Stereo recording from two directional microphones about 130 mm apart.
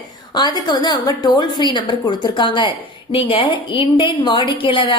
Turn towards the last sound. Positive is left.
turn(degrees=40)  # may be behind; listen again after turning